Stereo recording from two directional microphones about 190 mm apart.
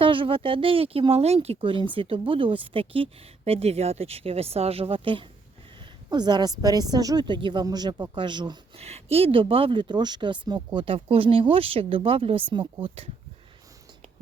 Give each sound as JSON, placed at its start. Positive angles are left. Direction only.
{"t": 0.0, "sound": "speech", "side_deg": -25}